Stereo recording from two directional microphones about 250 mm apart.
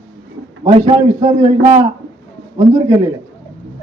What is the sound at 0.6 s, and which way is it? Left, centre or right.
A man's voice, right.